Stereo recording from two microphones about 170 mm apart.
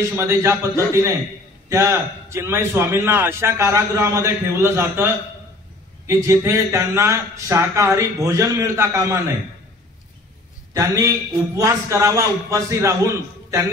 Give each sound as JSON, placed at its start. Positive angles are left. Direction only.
{"t": 0.2, "sound": "a man's voice", "side_deg": -15}
{"t": 10.7, "sound": "a man's voice", "side_deg": -20}